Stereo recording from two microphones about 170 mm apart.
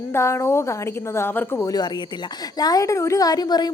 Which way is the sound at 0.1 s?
15° left (ahead or behind).